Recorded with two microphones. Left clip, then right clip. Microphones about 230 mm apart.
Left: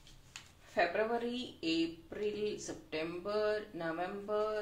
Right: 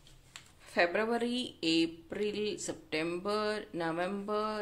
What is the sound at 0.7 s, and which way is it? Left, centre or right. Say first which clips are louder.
Speech: right 3 dB; right.